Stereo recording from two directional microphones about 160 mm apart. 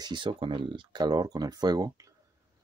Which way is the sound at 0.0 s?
30° right (ahead or behind).